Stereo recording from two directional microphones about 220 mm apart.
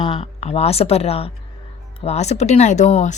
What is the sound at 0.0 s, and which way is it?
Speech, 25° left (ahead or behind).